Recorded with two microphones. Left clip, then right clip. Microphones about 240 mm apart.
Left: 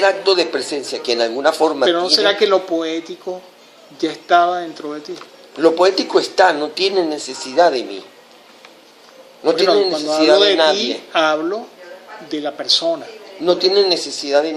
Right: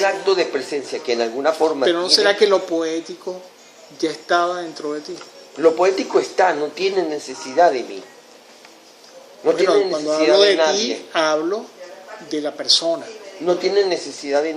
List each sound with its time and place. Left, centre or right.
0.0 s speech: left
1.8 s speech: centre
5.5 s speech: left
9.4 s a man's voice: left
10.3 s speech: centre
13.4 s speech: left